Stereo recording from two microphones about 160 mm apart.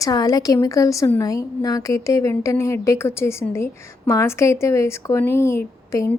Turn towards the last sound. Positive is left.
turn(degrees=15)  # may be behind; listen again after turning